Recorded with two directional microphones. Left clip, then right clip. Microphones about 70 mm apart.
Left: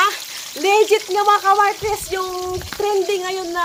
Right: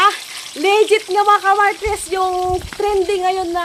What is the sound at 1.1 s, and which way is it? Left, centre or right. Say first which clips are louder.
Speech: right 1 dB; right.